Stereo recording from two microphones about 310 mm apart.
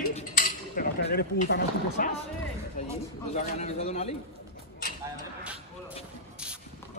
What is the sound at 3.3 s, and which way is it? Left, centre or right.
Speech, left.